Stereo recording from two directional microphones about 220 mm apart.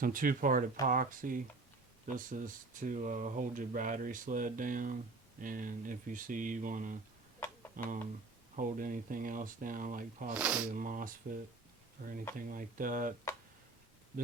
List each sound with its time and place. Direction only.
0.0 s speech: 40° right (ahead or behind)
10.3 s speech: 5° right (ahead or behind)
10.7 s speech: 40° right (ahead or behind)